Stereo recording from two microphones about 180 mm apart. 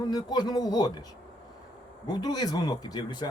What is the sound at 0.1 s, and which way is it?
Speech, 20° left (ahead or behind).